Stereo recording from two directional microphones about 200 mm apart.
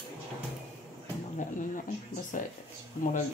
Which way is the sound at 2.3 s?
40° left (ahead or behind).